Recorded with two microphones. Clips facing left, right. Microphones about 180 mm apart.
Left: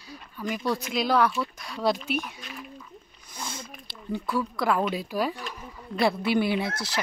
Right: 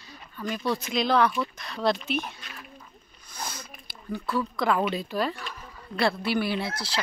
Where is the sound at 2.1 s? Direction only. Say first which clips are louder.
Even; 10° left (ahead or behind).